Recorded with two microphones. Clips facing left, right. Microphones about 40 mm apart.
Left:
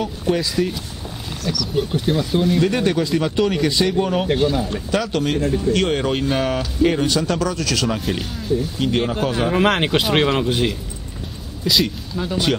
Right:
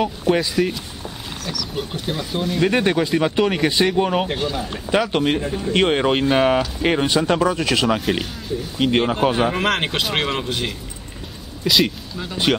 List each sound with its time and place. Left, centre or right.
0.0 s speech: right
1.4 s speech: centre
2.6 s speech: right
4.3 s speech: centre
4.9 s speech: right
9.5 s speech: centre